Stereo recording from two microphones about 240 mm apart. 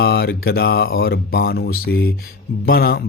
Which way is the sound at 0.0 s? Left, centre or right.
Left.